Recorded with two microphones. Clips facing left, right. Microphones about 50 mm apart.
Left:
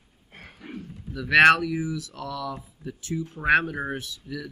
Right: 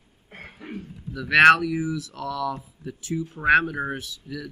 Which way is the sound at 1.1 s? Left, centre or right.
Centre.